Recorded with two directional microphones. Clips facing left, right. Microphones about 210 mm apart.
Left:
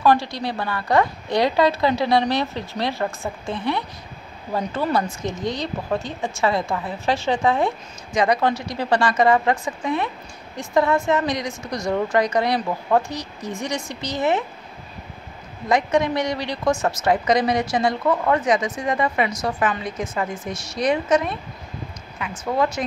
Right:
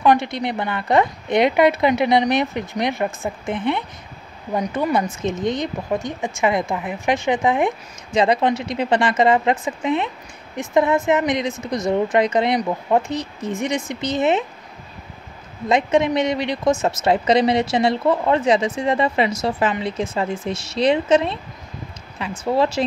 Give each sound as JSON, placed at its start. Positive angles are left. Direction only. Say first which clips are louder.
{"t": 0.0, "sound": "speech", "louder": "right 2 dB", "side_deg": -20}
{"t": 15.7, "sound": "speech", "louder": "right 2 dB", "side_deg": -20}
{"t": 22.4, "sound": "speech", "louder": "right 3 dB", "side_deg": -30}